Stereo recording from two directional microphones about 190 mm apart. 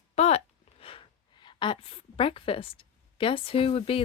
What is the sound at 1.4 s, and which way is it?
A woman's voice, 25° left (ahead or behind).